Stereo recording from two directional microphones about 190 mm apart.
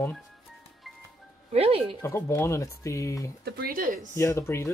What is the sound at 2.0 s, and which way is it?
Speech, 15° left (ahead or behind).